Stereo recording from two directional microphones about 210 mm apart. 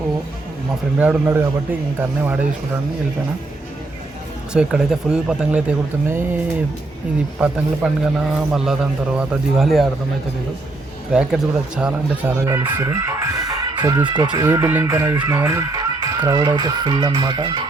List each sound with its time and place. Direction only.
0.9 s speech: 10° right (ahead or behind)
4.5 s a man's voice: 5° right (ahead or behind)
11.1 s a man's voice: 5° right (ahead or behind); by 17.7 s 25° right (ahead or behind)